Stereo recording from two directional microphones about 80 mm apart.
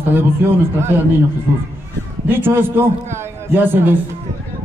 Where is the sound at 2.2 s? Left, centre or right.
Right.